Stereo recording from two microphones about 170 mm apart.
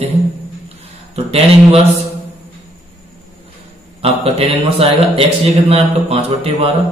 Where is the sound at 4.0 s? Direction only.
35° right (ahead or behind).